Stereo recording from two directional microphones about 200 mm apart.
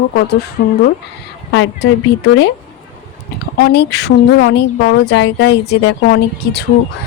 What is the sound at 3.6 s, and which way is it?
Speech, 55° left (ahead or behind).